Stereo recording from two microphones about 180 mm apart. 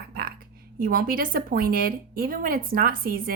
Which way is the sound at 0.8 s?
55° right (ahead or behind).